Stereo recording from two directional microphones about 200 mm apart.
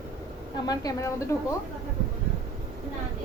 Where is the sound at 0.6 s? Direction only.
20° left (ahead or behind).